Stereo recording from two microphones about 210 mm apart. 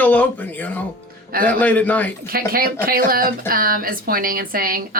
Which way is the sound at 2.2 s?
45° right (ahead or behind).